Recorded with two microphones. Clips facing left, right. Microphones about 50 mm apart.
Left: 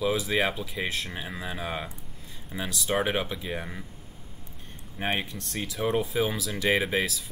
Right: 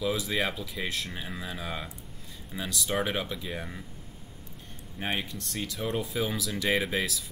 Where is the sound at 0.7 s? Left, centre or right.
Centre.